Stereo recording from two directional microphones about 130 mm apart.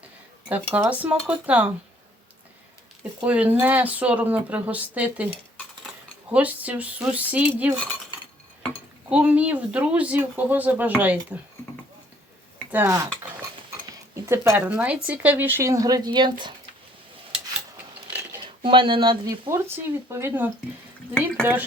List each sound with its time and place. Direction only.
0.4 s speech: 10° right (ahead or behind)
3.0 s speech: 10° right (ahead or behind)
9.0 s speech: 10° right (ahead or behind)
12.7 s speech: 15° right (ahead or behind); by 16.5 s 35° right (ahead or behind)
18.6 s speech: 40° right (ahead or behind); by 20.5 s 15° right (ahead or behind)
21.1 s speech: 5° left (ahead or behind)